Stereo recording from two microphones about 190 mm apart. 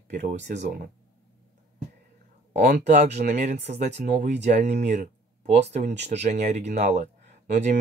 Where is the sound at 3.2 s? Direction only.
60° right (ahead or behind).